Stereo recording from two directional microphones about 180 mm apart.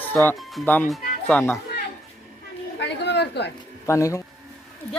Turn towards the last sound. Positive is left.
turn(degrees=15)  # may be behind; listen again after turning